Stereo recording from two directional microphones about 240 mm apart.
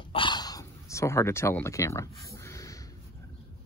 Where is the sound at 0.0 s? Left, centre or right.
Left.